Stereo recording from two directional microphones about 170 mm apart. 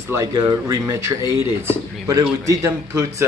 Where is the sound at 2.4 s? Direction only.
20° right (ahead or behind).